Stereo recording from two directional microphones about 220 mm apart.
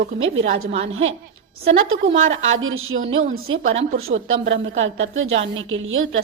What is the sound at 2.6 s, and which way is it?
A woman's voice, 65° right (ahead or behind).